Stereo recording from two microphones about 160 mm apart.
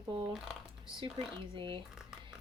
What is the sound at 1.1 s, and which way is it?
Speech, 30° right (ahead or behind).